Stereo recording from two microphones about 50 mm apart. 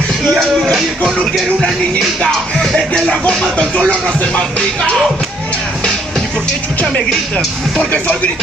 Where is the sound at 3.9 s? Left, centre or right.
Centre.